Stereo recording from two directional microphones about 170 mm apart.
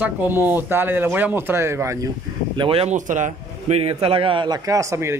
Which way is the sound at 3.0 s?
50° right (ahead or behind).